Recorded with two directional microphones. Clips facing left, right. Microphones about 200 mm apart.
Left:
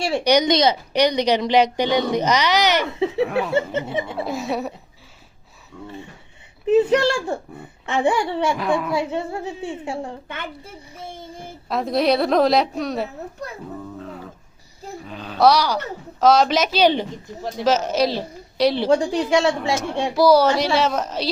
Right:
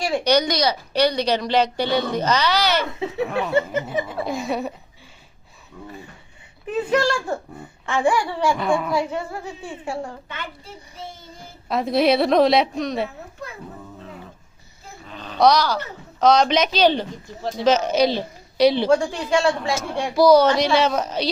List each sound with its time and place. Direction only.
0.3 s a woman's voice: 20° left (ahead or behind)
3.5 s a woman's voice: 25° left (ahead or behind)
4.3 s a woman's voice: 5° left (ahead or behind)
6.7 s a woman's voice: 25° left (ahead or behind)
8.5 s a woman's voice: centre (ahead or behind)
8.9 s a woman's voice: 25° left (ahead or behind)
10.2 s a woman's voice: 55° left (ahead or behind)
11.7 s a woman's voice: centre (ahead or behind)
15.0 s a woman's voice: 5° left (ahead or behind)
17.7 s a woman's voice: 5° left (ahead or behind)
19.3 s a woman's voice: 20° left (ahead or behind)
20.1 s a woman's voice: 5° left (ahead or behind)